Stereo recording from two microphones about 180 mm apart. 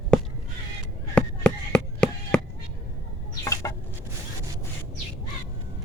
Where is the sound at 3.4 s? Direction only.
15° left (ahead or behind).